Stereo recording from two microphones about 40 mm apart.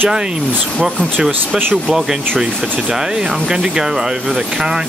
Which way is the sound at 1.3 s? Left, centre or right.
Right.